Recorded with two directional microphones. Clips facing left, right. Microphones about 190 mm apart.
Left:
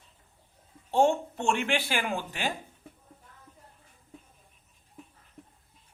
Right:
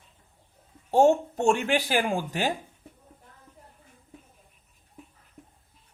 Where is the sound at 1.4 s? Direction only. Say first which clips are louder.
Right 5 dB; 40° right (ahead or behind).